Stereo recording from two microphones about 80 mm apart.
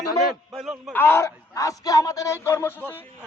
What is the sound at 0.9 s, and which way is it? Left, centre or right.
Speech, left.